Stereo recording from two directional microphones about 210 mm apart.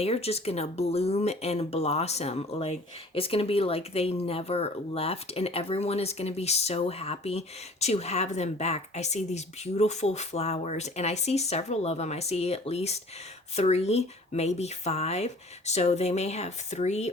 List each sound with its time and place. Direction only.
0.0 s speech: 30° left (ahead or behind)